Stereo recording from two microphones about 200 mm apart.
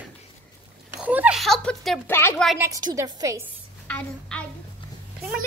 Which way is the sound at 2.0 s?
10° left (ahead or behind).